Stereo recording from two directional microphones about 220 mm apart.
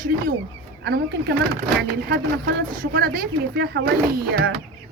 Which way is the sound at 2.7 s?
40° right (ahead or behind).